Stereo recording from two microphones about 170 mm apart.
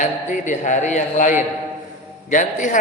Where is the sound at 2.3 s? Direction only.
45° left (ahead or behind).